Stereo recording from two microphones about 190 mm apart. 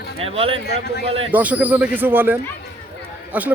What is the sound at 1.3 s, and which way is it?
A man's voice, 10° right (ahead or behind).